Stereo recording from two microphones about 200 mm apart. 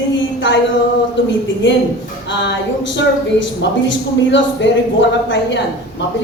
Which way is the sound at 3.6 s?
65° left (ahead or behind).